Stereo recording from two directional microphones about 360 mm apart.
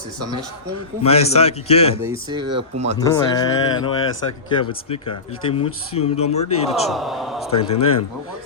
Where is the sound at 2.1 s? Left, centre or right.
Centre.